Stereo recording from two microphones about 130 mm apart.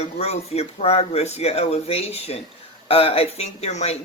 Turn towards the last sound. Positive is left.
turn(degrees=55)  # may be behind; listen again after turning